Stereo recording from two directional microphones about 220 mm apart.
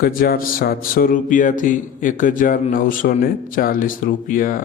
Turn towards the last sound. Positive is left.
turn(degrees=40)  # may be behind; listen again after turning